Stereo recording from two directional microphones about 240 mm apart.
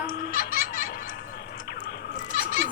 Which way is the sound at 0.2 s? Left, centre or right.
Left.